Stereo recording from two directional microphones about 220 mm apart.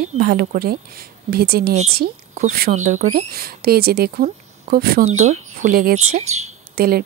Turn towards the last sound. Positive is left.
turn(degrees=-45)  # may be behind; listen again after turning